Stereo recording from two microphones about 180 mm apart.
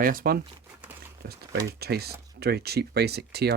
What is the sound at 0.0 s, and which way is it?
Speech, 50° right (ahead or behind).